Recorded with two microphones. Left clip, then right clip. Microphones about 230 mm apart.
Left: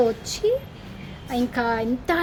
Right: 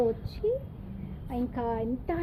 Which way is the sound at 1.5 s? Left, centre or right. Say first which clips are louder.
Left 7 dB; left.